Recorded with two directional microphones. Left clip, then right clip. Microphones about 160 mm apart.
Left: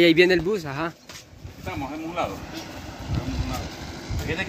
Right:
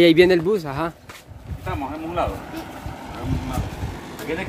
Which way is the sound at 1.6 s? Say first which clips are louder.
Right 3 dB; 5° left (ahead or behind).